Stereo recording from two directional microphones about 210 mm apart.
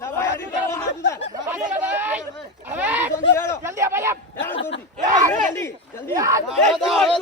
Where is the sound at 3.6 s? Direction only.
10° right (ahead or behind).